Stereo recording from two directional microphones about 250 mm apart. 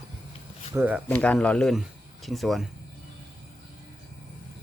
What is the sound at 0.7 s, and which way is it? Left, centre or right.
Speech, centre.